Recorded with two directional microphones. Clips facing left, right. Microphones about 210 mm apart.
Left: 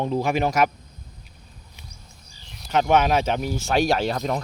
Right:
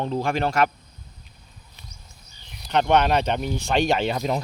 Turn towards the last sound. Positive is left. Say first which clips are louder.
# right 1 dB
turn(degrees=-10)  # may be behind; listen again after turning